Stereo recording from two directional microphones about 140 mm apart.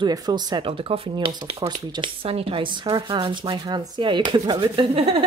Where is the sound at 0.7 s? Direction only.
40° right (ahead or behind).